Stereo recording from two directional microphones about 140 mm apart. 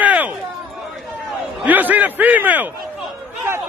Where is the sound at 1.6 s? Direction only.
10° right (ahead or behind).